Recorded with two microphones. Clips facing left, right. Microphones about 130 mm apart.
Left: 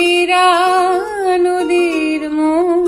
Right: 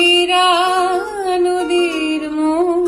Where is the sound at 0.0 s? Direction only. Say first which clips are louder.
Left 2 dB; 15° right (ahead or behind).